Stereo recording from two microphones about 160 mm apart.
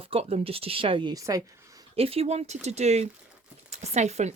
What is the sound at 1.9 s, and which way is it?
Speech, 40° right (ahead or behind).